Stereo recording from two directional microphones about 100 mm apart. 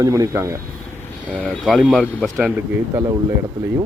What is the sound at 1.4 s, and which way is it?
Speech, centre (ahead or behind).